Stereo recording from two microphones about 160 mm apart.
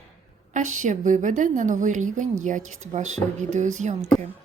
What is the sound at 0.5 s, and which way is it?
Speech, 50° right (ahead or behind).